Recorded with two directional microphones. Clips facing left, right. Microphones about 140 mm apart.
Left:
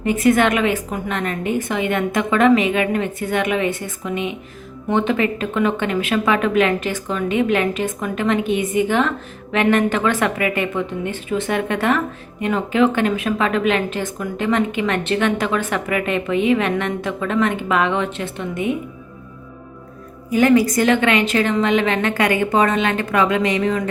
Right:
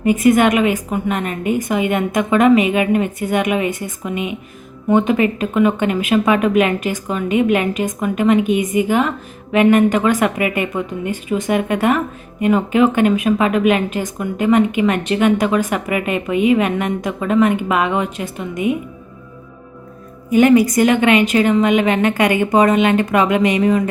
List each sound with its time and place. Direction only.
0.0 s speech: 15° right (ahead or behind)
20.3 s a woman's voice: 20° right (ahead or behind)